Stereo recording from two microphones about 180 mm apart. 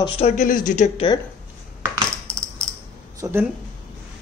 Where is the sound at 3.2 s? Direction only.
10° right (ahead or behind).